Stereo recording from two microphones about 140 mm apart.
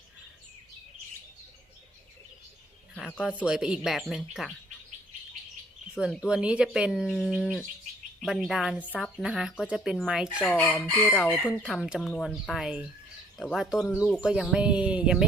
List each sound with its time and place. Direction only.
3.2 s speech: 5° right (ahead or behind)
6.1 s speech: 5° right (ahead or behind)
10.4 s chicken: 10° left (ahead or behind)
11.1 s speech: 5° left (ahead or behind)